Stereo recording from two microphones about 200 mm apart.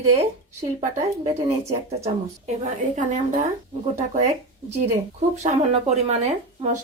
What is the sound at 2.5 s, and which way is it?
Speech, 35° right (ahead or behind).